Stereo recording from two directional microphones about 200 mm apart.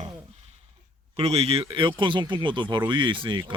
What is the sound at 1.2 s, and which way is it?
Speech, 30° right (ahead or behind).